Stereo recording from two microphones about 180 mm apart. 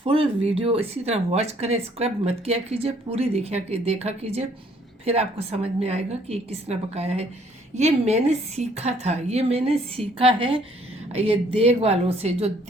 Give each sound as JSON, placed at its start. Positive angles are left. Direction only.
{"t": 0.0, "sound": "a woman's voice", "side_deg": -30}